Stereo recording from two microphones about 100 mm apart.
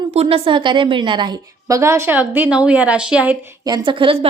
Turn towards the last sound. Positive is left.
turn(degrees=-60)  # may be behind; listen again after turning